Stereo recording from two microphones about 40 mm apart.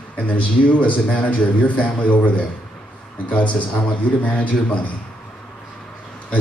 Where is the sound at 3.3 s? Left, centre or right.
Left.